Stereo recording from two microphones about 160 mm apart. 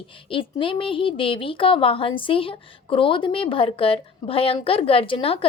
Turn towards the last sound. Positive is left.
turn(degrees=35)  # may be behind; listen again after turning